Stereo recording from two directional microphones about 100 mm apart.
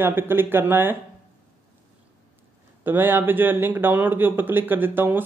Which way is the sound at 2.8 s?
20° right (ahead or behind).